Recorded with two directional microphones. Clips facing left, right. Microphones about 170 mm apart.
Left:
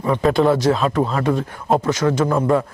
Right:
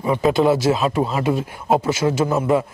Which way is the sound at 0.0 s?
5° right (ahead or behind).